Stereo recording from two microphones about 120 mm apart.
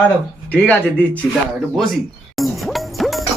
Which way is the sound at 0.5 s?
15° left (ahead or behind).